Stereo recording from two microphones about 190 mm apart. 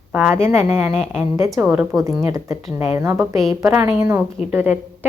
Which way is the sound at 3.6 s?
15° right (ahead or behind).